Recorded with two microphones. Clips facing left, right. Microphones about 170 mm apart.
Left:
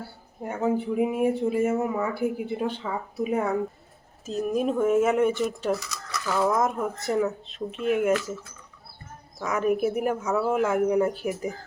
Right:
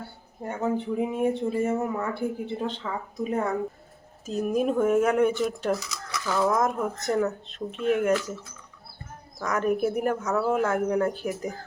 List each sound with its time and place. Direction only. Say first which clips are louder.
0.4 s speech: left 2 dB; 5° left (ahead or behind)
9.4 s speech: left 1 dB; 5° left (ahead or behind)